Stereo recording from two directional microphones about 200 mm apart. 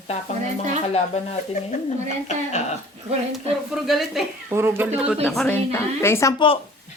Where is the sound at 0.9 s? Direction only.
35° left (ahead or behind).